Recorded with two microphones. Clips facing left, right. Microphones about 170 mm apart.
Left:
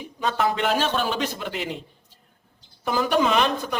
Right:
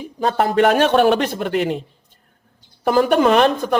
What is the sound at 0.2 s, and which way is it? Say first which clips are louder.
Speech: right 8 dB; 50° right (ahead or behind).